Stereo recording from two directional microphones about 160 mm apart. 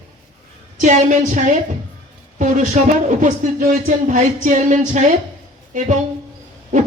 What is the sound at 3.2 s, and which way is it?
Speech, 55° right (ahead or behind).